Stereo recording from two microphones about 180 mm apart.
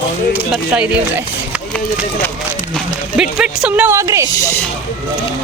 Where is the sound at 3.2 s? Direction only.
5° right (ahead or behind).